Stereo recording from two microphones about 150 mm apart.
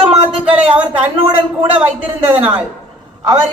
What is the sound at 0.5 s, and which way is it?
Speech, 10° right (ahead or behind).